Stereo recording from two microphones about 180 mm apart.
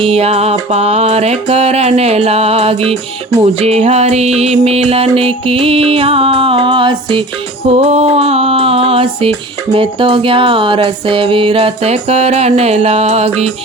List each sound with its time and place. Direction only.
0.0 s music: 30° right (ahead or behind)